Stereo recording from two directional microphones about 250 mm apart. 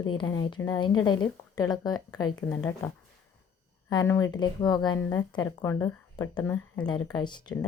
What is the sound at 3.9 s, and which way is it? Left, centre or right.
Speech, centre.